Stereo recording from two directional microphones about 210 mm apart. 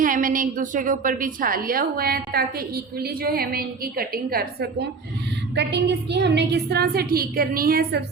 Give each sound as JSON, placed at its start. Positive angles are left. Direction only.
{"t": 0.0, "sound": "a woman's voice", "side_deg": -40}